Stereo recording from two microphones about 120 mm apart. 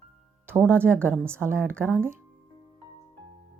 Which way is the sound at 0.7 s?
20° right (ahead or behind).